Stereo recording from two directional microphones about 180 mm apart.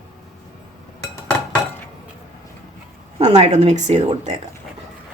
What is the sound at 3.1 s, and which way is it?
Speech, 35° right (ahead or behind).